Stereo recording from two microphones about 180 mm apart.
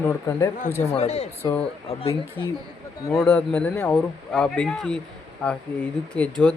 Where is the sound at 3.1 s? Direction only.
5° left (ahead or behind).